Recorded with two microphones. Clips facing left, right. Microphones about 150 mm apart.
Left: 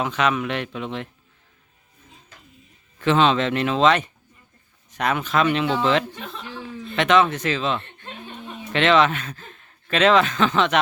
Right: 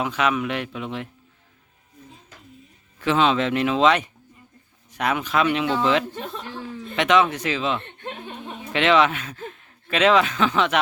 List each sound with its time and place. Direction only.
0.0 s speech: 10° right (ahead or behind)
3.0 s speech: 10° right (ahead or behind)
6.1 s speech: 45° right (ahead or behind)
6.9 s speech: 10° right (ahead or behind)
7.8 s chuckle: 55° right (ahead or behind)
8.7 s speech: 10° right (ahead or behind)